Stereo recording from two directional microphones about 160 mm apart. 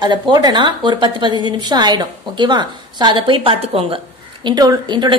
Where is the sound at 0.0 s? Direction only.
25° right (ahead or behind).